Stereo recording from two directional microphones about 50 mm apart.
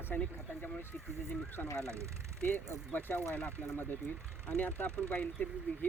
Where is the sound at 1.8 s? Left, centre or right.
Right.